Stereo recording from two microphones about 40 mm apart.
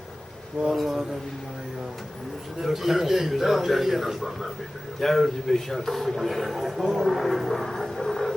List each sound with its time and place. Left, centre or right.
0.7 s a man's voice: centre
2.6 s a man's voice: centre